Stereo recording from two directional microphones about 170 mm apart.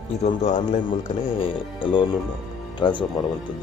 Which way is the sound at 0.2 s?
40° left (ahead or behind).